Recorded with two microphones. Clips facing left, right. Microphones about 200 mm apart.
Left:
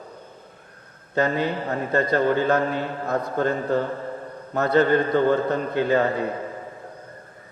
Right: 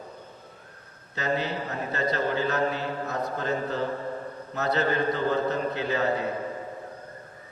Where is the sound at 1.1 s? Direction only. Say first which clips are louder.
Left 6 dB; 55° left (ahead or behind).